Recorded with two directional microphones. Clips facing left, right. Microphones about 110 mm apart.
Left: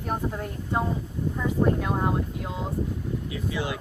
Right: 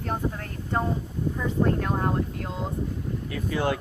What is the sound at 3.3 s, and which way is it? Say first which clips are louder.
Speech: right 6 dB; 50° right (ahead or behind).